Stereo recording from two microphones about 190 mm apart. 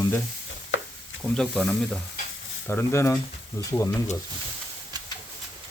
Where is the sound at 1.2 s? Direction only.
5° left (ahead or behind).